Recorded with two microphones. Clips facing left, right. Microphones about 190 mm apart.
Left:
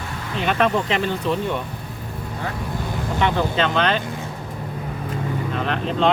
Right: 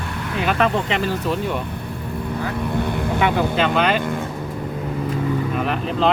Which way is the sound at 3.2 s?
10° right (ahead or behind).